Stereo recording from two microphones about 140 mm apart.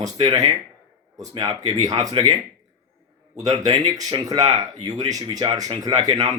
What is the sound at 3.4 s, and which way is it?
Speech, 30° right (ahead or behind).